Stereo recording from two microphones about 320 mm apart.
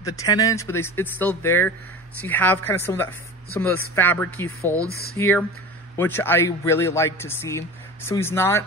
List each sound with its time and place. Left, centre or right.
0.0 s speech: centre